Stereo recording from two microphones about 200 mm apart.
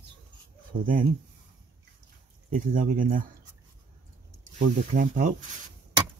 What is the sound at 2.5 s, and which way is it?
Speech, 45° right (ahead or behind).